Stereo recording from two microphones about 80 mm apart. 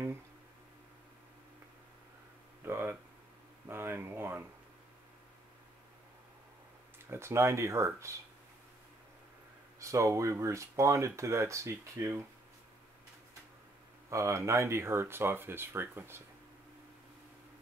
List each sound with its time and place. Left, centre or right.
2.6 s a sound: right
7.1 s speech: right
9.8 s speech: right
14.1 s speech: right